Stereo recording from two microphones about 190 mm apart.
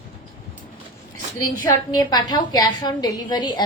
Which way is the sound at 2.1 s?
20° left (ahead or behind).